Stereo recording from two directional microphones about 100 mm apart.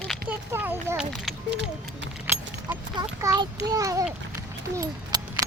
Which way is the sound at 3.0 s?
45° right (ahead or behind).